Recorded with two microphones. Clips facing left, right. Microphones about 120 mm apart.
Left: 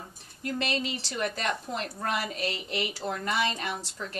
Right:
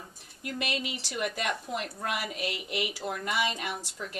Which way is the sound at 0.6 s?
10° right (ahead or behind).